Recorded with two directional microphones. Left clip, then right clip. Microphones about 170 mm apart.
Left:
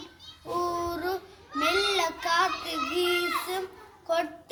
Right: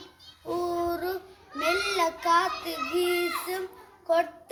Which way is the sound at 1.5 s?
25° right (ahead or behind).